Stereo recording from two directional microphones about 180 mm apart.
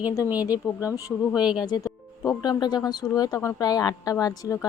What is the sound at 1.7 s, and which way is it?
Speech, 20° left (ahead or behind).